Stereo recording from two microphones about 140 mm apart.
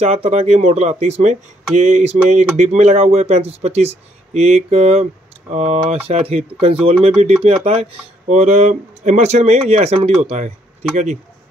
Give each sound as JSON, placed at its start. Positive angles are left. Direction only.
{"t": 0.0, "sound": "speech", "side_deg": -50}
{"t": 1.8, "sound": "a sound", "side_deg": -55}
{"t": 2.5, "sound": "speech", "side_deg": -55}